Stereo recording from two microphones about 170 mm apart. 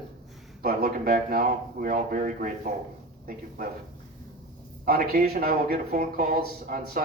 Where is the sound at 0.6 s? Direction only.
60° right (ahead or behind).